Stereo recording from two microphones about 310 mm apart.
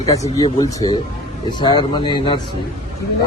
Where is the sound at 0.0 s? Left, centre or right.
Centre.